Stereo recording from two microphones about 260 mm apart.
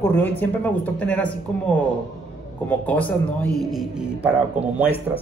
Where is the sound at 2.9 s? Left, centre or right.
Centre.